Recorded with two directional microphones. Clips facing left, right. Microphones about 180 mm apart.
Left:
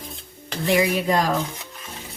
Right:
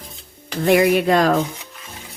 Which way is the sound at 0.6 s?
60° right (ahead or behind).